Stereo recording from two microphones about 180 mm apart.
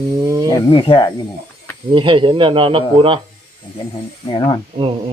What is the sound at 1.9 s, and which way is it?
Speech, 30° right (ahead or behind).